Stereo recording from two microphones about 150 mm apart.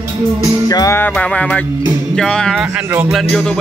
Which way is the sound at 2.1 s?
5° left (ahead or behind).